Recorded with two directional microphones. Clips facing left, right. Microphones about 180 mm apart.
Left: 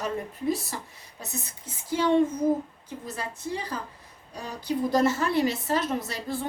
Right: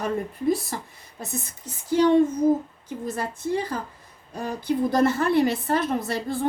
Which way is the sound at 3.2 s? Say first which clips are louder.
Right 6 dB; 55° right (ahead or behind).